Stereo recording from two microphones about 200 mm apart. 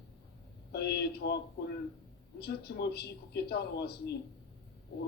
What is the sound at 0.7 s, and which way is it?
Speech, 55° left (ahead or behind).